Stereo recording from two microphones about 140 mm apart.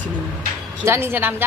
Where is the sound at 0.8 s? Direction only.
15° right (ahead or behind).